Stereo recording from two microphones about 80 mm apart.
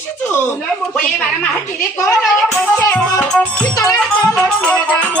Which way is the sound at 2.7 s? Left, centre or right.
Left.